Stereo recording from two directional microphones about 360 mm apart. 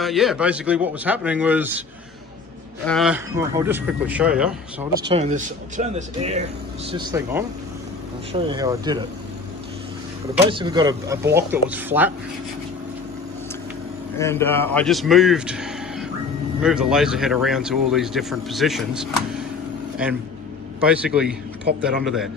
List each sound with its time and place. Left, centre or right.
0.0 s speech: centre
2.8 s speech: centre
5.0 s speech: centre
10.4 s speech: centre
14.1 s speech: centre
20.8 s speech: centre